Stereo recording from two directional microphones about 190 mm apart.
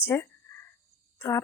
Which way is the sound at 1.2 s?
15° left (ahead or behind).